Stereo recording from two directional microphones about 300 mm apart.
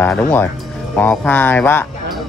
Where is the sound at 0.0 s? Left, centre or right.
Centre.